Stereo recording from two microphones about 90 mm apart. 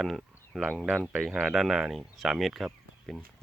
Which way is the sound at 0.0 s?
Centre (ahead or behind).